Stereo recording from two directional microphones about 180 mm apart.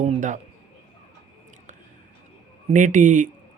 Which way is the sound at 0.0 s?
40° right (ahead or behind).